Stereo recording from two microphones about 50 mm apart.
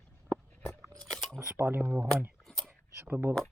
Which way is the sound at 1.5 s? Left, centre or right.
Right.